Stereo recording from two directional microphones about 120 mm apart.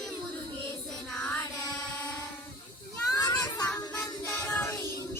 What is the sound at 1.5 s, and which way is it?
Child singing, 25° left (ahead or behind).